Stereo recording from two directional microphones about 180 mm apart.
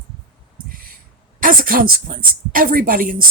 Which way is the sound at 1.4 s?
50° right (ahead or behind).